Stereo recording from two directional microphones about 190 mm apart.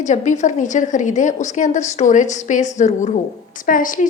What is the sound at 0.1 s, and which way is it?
A woman's voice, 40° left (ahead or behind).